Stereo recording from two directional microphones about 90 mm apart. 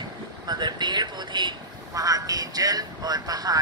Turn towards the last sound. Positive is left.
turn(degrees=-45)  # may be behind; listen again after turning